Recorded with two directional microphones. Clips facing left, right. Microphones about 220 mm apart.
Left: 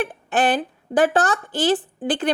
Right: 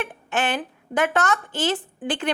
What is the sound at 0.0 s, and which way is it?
A woman's voice, 35° left (ahead or behind).